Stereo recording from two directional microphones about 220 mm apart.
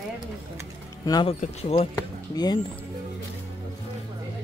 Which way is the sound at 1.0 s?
20° left (ahead or behind).